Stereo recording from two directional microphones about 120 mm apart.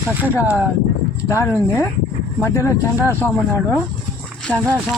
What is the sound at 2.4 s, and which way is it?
Speech, 20° left (ahead or behind).